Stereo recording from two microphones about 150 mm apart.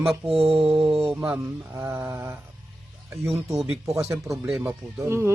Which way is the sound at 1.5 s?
15° right (ahead or behind).